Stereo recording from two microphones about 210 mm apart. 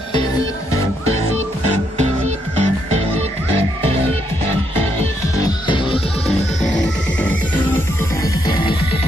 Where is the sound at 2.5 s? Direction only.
30° right (ahead or behind).